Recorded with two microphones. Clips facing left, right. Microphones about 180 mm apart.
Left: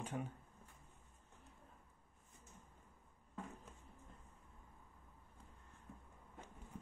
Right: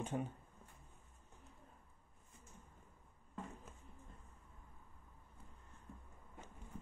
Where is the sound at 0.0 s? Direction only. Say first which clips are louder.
Right 4 dB; 25° right (ahead or behind).